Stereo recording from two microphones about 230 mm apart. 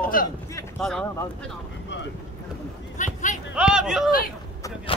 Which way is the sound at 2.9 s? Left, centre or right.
Left.